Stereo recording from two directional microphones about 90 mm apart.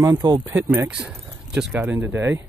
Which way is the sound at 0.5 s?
25° right (ahead or behind).